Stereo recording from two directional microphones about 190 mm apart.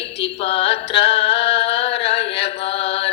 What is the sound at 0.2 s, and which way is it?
Music, 30° left (ahead or behind).